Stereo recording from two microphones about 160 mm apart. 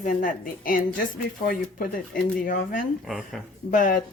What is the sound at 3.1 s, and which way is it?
Speech, centre (ahead or behind).